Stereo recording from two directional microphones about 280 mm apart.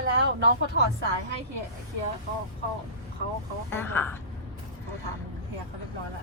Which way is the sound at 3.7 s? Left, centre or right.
Centre.